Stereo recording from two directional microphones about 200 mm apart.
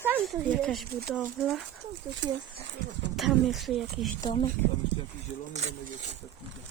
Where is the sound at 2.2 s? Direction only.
65° right (ahead or behind).